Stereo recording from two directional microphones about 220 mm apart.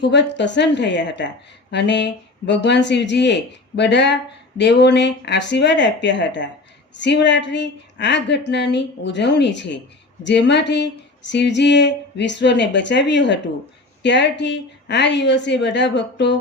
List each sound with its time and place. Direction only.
0.0 s speech: 50° left (ahead or behind)